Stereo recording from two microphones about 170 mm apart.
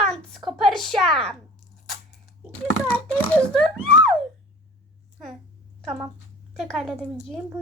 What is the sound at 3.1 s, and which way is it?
Speech, 5° left (ahead or behind).